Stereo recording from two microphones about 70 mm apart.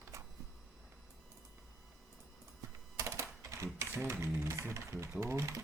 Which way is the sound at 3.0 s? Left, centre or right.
Right.